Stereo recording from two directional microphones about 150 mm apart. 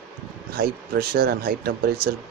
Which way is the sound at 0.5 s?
85° right.